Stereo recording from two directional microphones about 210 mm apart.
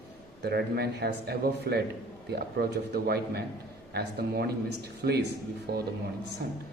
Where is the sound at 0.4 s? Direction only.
50° right (ahead or behind).